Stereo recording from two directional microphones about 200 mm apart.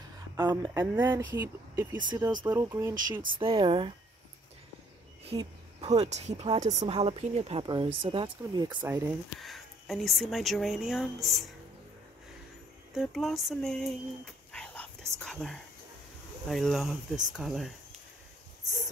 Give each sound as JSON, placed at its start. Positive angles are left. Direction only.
{"t": 0.4, "sound": "a woman's voice", "side_deg": -20}
{"t": 3.3, "sound": "a woman's voice", "side_deg": -25}
{"t": 5.3, "sound": "a woman's voice", "side_deg": -30}
{"t": 9.4, "sound": "speech", "side_deg": 0}
{"t": 12.9, "sound": "a sound", "side_deg": 0}
{"t": 16.4, "sound": "speech", "side_deg": 0}